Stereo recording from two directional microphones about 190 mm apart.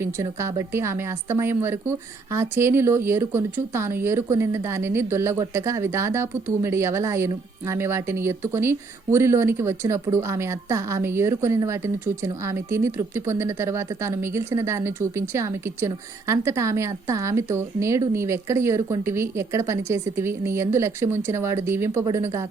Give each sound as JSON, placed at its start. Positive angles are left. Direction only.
{"t": 0.0, "sound": "speech", "side_deg": -15}